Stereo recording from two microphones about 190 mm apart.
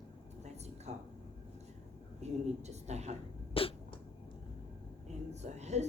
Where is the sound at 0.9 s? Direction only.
35° right (ahead or behind).